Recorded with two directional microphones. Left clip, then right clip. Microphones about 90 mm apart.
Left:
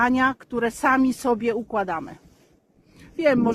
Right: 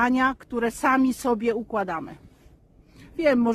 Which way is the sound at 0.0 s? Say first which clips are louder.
Left 2 dB; 25° right (ahead or behind).